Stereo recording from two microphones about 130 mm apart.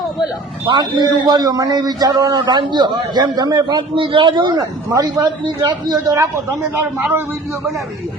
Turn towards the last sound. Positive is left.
turn(degrees=-20)  # may be behind; listen again after turning